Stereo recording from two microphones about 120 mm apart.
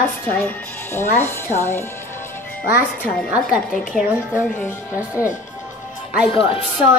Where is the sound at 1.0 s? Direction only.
20° left (ahead or behind).